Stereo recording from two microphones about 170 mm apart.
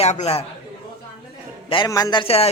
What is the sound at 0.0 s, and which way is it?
Speech, 40° left (ahead or behind).